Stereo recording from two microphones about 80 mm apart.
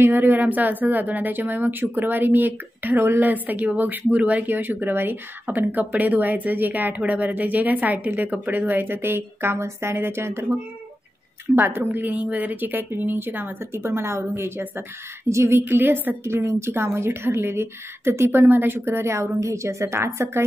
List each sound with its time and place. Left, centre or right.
0.0 s speech: right